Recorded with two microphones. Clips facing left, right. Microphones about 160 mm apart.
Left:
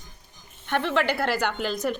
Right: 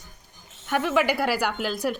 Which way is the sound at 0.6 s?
5° right (ahead or behind).